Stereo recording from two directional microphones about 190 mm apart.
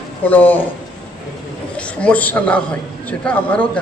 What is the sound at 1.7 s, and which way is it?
A man's voice, 5° left (ahead or behind).